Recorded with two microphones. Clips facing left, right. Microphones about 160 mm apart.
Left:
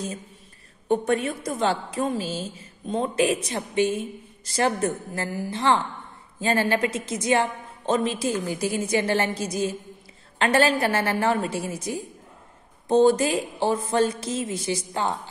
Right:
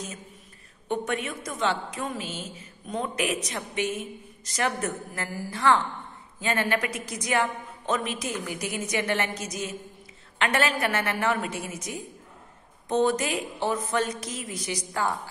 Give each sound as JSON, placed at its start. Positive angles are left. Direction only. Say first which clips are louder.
{"t": 0.8, "sound": "a woman's voice", "louder": "left 6 dB", "side_deg": 35}